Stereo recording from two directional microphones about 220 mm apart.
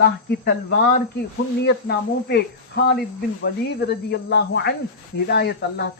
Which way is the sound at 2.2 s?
50° left (ahead or behind).